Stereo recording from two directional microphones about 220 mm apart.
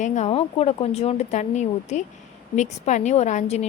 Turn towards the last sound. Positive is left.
turn(degrees=30)  # may be behind; listen again after turning